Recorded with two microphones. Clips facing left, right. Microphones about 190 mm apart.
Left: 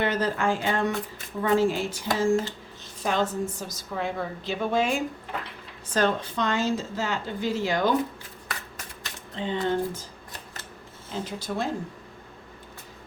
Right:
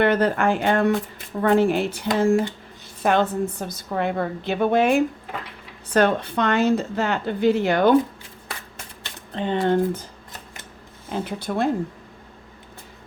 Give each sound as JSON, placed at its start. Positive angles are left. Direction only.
{"t": 0.0, "sound": "a woman's voice", "side_deg": -60}
{"t": 9.3, "sound": "a woman's voice", "side_deg": -60}
{"t": 11.1, "sound": "a woman's voice", "side_deg": -60}